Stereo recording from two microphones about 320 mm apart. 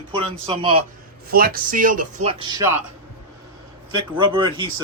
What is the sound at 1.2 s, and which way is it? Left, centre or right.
Speech, right.